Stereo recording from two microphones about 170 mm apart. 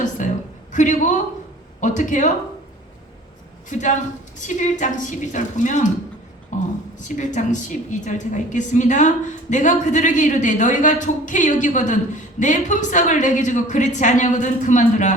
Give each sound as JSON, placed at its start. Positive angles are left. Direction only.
{"t": 0.2, "sound": "a sound", "side_deg": 50}
{"t": 0.7, "sound": "a woman's voice", "side_deg": 45}
{"t": 3.7, "sound": "a woman's voice", "side_deg": 45}